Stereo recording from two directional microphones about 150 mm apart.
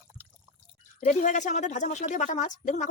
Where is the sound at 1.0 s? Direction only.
55° left (ahead or behind).